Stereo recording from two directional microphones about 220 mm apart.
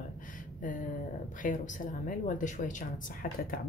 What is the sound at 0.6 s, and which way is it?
Speech, 35° left (ahead or behind).